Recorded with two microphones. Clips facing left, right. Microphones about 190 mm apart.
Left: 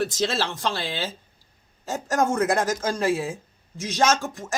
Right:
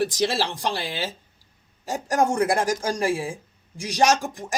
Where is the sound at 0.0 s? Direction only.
15° right (ahead or behind).